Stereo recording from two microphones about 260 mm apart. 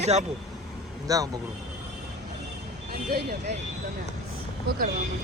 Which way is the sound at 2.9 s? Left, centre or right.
Right.